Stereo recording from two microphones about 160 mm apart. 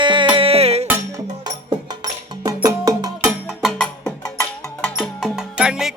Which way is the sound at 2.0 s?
20° right (ahead or behind).